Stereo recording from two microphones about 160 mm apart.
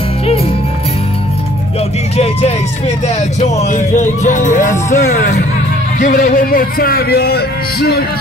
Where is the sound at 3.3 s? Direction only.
45° left (ahead or behind).